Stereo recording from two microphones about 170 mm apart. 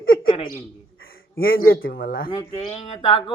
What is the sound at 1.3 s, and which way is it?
Speech, 60° left (ahead or behind).